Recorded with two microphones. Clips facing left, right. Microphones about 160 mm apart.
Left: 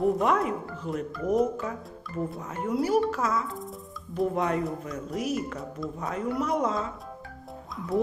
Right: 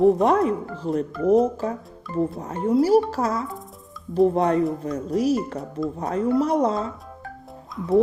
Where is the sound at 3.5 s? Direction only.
Centre (ahead or behind).